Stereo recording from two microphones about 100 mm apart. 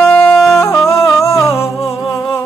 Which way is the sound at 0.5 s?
30° left (ahead or behind).